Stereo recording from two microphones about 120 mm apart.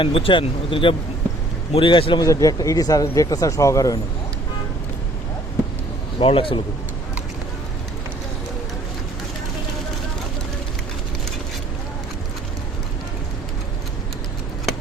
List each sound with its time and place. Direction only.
0.0 s speech: 50° left (ahead or behind)
2.2 s speech: 30° left (ahead or behind)
6.1 s speech: 50° left (ahead or behind)